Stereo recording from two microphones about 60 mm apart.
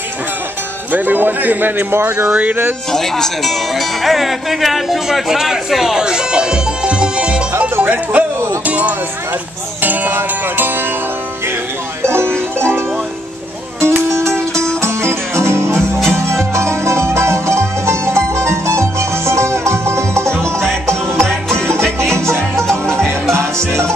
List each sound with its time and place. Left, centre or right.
0.9 s speech: right
2.2 s speech: centre
2.9 s speech: centre; by 8.3 s right
8.6 s music: right
9.8 s speech: right
12.1 s music: right
21.3 s music: centre
22.1 s music: right
22.7 s music: centre
23.3 s music: right